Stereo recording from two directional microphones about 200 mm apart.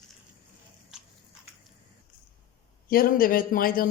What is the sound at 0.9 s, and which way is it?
Biting, 5° right (ahead or behind).